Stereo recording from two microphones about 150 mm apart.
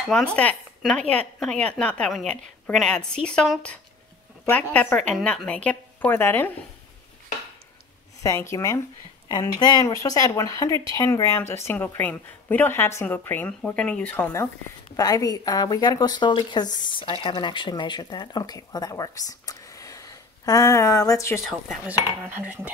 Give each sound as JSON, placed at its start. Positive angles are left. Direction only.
{"t": 0.0, "sound": "speech", "side_deg": 5}
{"t": 8.2, "sound": "speech", "side_deg": 20}
{"t": 21.5, "sound": "speech", "side_deg": 0}